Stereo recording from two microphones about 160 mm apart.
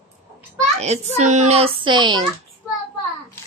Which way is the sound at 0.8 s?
45° right (ahead or behind).